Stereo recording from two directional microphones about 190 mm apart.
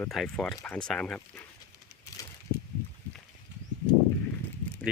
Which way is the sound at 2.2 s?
20° left (ahead or behind).